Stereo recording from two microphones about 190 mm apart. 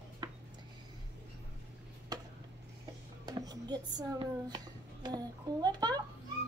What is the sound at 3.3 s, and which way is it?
Speech, 20° right (ahead or behind).